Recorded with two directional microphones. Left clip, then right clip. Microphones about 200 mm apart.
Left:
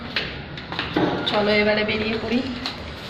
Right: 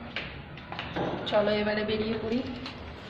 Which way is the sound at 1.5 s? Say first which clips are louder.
Left 9 dB; 15° right (ahead or behind).